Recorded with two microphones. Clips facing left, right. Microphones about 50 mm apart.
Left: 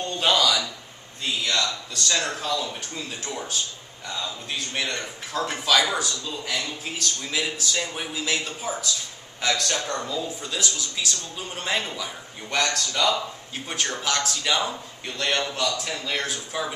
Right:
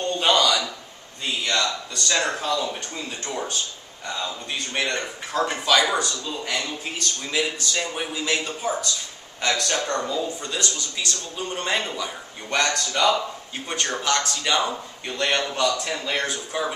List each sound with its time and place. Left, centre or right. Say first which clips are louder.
0.0 s a sound: right 2 dB; centre
1.2 s a man's voice: right 1 dB; centre
6.9 s a man's voice: even; centre
13.7 s a man's voice: right 3 dB; centre
14.7 s a man's voice: right 3 dB; centre